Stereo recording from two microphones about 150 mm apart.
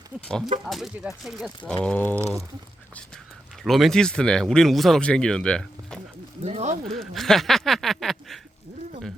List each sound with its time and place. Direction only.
0.3 s speech: 5° left (ahead or behind)
2.1 s speech: 20° right (ahead or behind)
3.6 s speech: centre (ahead or behind)
6.4 s speech: 50° right (ahead or behind)
6.8 s speech: centre (ahead or behind)